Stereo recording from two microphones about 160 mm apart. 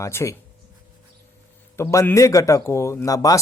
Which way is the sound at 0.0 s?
15° left (ahead or behind).